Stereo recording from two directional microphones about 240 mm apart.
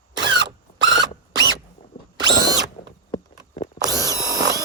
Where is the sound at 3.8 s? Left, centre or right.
Centre.